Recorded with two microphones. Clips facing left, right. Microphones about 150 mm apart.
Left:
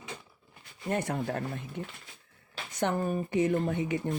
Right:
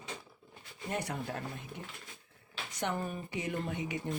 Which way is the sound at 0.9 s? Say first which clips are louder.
Left 6 dB; 50° left (ahead or behind).